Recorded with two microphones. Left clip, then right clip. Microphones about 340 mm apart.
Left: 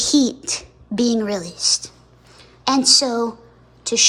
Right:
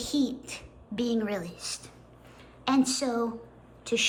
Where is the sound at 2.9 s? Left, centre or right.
Centre.